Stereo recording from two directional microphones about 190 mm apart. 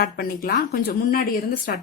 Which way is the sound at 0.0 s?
50° left (ahead or behind).